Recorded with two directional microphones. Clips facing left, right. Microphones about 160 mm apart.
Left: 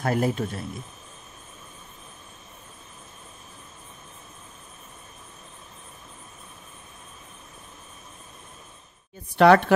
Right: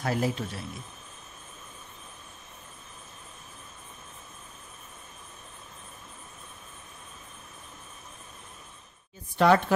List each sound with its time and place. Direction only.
0.0 s speech: 50° left (ahead or behind)
9.4 s speech: 70° left (ahead or behind)